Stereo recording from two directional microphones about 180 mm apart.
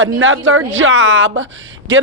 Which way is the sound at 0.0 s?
90° right.